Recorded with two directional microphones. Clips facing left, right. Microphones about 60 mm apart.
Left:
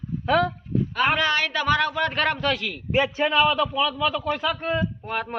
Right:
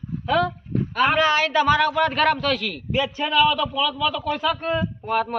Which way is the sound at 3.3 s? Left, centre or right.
Centre.